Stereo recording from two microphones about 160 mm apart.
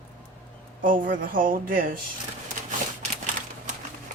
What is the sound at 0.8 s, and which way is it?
Speech, 60° right (ahead or behind).